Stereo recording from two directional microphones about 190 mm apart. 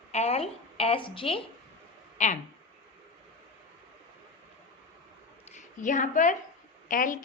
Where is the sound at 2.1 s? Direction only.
40° left (ahead or behind).